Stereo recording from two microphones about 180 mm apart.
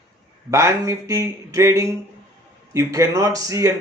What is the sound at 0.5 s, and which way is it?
Speech, 15° right (ahead or behind).